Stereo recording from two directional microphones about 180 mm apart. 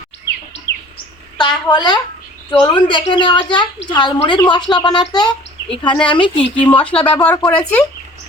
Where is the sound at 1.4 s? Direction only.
25° left (ahead or behind).